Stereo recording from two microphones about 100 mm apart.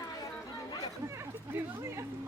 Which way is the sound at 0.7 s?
40° left (ahead or behind).